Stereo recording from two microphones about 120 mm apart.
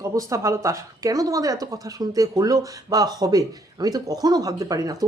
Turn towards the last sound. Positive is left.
turn(degrees=-30)  # may be behind; listen again after turning